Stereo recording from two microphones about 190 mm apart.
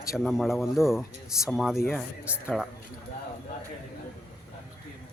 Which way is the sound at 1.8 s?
10° left (ahead or behind).